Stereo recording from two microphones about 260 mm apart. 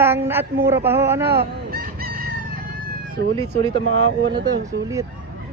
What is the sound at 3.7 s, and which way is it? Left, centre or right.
Speech, right.